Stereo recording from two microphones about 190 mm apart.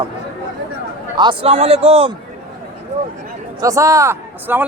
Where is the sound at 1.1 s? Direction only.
25° right (ahead or behind).